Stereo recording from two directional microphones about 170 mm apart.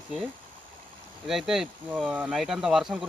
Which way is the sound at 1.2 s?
Centre (ahead or behind).